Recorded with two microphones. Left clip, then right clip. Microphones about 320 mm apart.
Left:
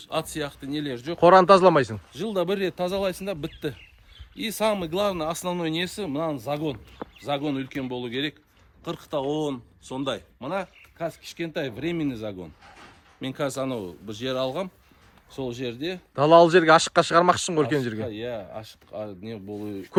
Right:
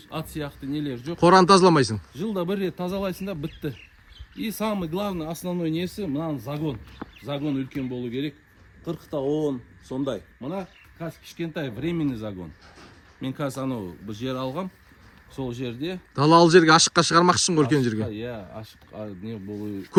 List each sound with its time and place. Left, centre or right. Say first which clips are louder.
0.0 s speech: left 4 dB; centre
8.8 s a man's voice: even; left
10.6 s speech: left 5 dB; centre